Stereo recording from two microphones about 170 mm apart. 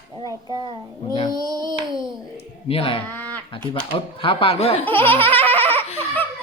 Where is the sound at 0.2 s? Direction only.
25° right (ahead or behind).